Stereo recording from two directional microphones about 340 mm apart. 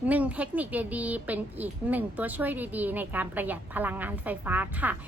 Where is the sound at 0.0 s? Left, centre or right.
Centre.